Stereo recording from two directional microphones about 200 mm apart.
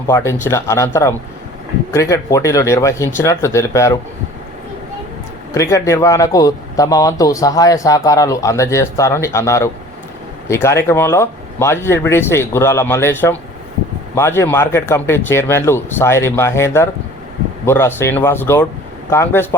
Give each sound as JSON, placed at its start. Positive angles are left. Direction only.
{"t": 0.1, "sound": "speech", "side_deg": 15}
{"t": 1.9, "sound": "speech", "side_deg": 15}
{"t": 5.5, "sound": "speech", "side_deg": 15}